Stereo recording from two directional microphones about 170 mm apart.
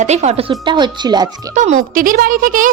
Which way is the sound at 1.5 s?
45° right (ahead or behind).